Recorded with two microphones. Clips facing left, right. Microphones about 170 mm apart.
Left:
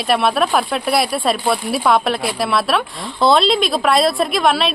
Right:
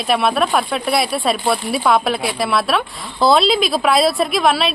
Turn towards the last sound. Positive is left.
turn(degrees=0)  # may be behind; listen again after turning